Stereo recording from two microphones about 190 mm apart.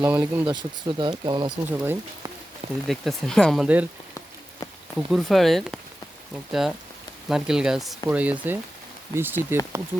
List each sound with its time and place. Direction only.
0.0 s speech: 10° right (ahead or behind)
0.5 s speech: 25° right (ahead or behind)
1.7 s speech: 10° right (ahead or behind)
2.8 s speech: centre (ahead or behind)
4.9 s speech: centre (ahead or behind)